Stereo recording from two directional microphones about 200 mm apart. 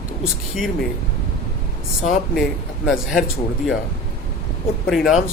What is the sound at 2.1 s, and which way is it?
Speech, centre (ahead or behind).